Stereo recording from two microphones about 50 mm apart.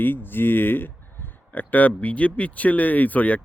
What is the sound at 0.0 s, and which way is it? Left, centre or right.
Speech, left.